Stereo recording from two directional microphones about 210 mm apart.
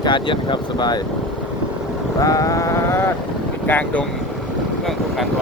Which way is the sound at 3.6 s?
10° left (ahead or behind).